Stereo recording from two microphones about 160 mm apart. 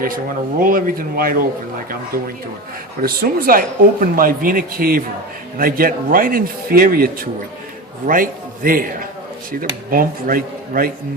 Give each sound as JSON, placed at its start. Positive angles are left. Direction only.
{"t": 0.6, "sound": "a man's voice", "side_deg": -60}